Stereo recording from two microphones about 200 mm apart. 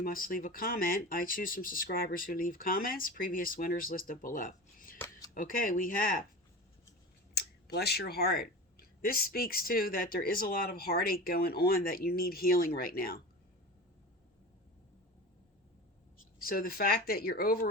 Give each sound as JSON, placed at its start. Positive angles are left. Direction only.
{"t": 0.0, "sound": "speech", "side_deg": 45}
{"t": 7.3, "sound": "speech", "side_deg": 55}
{"t": 16.4, "sound": "speech", "side_deg": 45}